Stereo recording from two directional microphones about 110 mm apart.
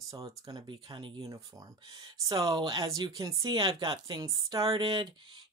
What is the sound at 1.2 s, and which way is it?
Speech, 30° right (ahead or behind).